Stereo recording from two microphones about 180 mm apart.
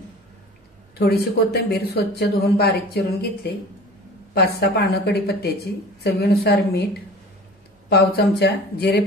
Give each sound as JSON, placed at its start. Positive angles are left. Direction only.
{"t": 0.9, "sound": "speech", "side_deg": 60}
{"t": 7.9, "sound": "speech", "side_deg": 65}